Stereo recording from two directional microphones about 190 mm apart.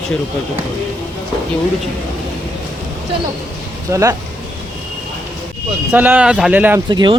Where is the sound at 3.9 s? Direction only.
15° right (ahead or behind).